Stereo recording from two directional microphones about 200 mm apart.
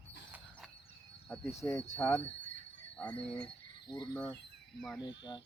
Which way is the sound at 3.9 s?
20° left (ahead or behind).